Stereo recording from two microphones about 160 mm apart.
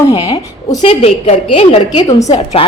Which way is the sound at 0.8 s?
45° left (ahead or behind).